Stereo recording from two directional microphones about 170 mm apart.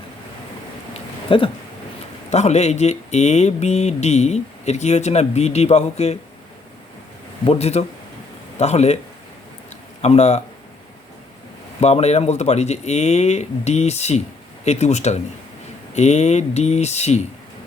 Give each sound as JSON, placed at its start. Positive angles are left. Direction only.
{"t": 0.9, "sound": "a sound", "side_deg": 30}
{"t": 2.3, "sound": "speech", "side_deg": 40}
{"t": 7.4, "sound": "speech", "side_deg": 35}
{"t": 10.0, "sound": "speech", "side_deg": 40}
{"t": 11.8, "sound": "speech", "side_deg": 40}